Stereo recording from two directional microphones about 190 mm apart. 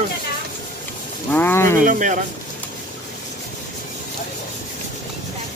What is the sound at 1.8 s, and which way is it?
Speech, 40° right (ahead or behind).